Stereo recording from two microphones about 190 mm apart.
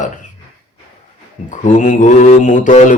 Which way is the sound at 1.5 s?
40° left (ahead or behind).